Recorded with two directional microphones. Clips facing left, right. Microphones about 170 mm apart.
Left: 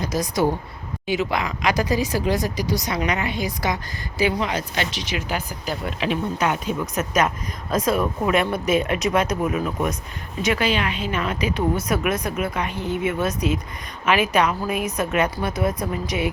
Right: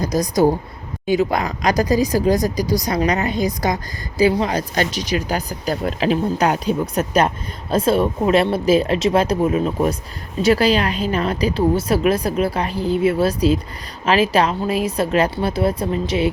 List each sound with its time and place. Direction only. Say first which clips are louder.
0.0 s speech: right 5 dB; 40° right (ahead or behind)